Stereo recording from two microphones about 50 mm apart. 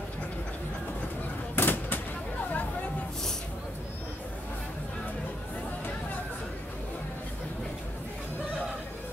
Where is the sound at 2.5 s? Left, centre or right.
Left.